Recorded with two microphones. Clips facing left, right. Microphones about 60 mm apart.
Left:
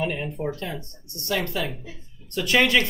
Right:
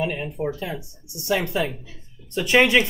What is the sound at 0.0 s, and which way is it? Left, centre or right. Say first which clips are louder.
Speech: right 1 dB; centre.